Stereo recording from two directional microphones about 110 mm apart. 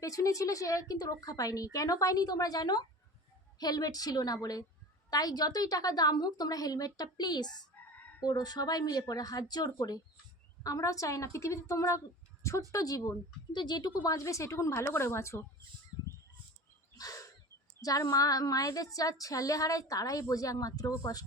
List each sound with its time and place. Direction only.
0.0 s a woman's voice: 30° left (ahead or behind)
15.9 s bird: 35° left (ahead or behind)
17.0 s a sound: 30° left (ahead or behind)
17.7 s a woman's voice: 35° left (ahead or behind)